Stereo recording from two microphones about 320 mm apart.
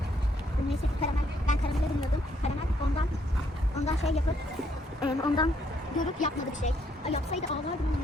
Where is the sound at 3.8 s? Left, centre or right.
Centre.